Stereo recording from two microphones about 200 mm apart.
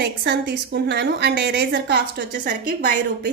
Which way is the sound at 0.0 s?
60° right (ahead or behind).